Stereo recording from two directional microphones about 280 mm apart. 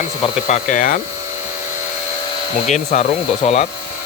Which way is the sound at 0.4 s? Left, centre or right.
Left.